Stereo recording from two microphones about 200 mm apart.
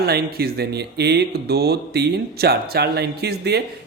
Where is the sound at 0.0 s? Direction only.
50° right (ahead or behind).